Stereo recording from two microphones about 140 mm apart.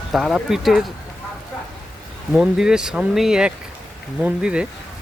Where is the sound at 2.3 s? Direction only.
5° right (ahead or behind).